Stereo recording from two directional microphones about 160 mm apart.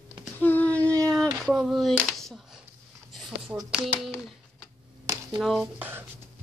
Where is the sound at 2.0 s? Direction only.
Centre (ahead or behind).